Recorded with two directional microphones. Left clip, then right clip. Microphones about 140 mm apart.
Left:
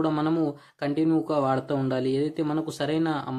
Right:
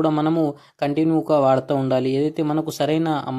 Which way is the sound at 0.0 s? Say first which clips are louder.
Right 5 dB; 30° right (ahead or behind).